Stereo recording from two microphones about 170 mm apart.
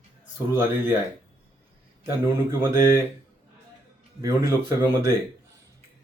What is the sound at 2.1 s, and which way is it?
Speech, 15° right (ahead or behind).